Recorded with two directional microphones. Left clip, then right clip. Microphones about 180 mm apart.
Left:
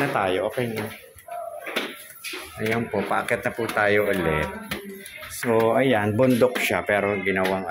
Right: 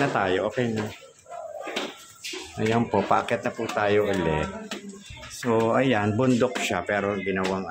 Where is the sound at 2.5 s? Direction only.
20° right (ahead or behind).